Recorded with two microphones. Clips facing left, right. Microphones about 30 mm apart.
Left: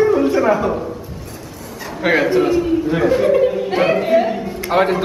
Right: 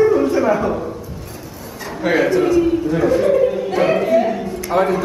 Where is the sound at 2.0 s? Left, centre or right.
Left.